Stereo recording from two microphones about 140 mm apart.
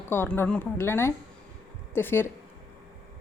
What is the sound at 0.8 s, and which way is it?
Speech, 20° left (ahead or behind).